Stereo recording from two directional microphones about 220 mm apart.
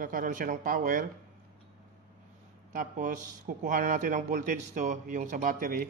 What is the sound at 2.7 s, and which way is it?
Speech, 35° right (ahead or behind).